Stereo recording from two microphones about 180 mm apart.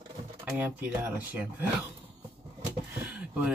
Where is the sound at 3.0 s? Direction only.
5° right (ahead or behind).